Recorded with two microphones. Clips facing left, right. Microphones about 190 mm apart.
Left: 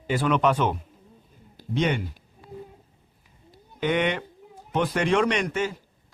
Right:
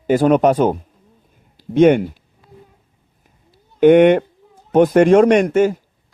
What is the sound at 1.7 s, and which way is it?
Speech, 50° right (ahead or behind).